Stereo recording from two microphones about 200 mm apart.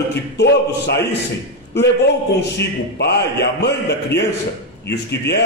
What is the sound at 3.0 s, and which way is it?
A man's voice, 55° left (ahead or behind).